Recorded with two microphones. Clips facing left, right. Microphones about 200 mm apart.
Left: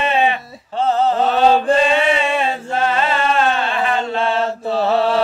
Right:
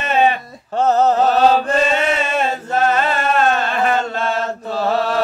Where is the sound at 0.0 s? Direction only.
45° right (ahead or behind).